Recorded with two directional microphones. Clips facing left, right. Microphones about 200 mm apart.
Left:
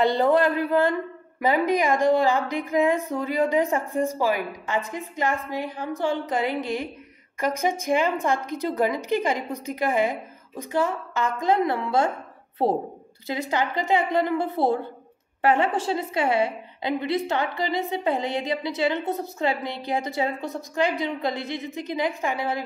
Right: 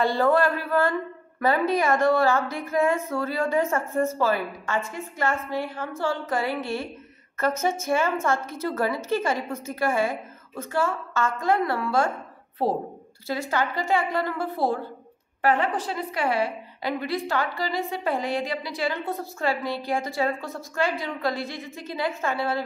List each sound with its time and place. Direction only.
0.0 s a woman's voice: 20° left (ahead or behind)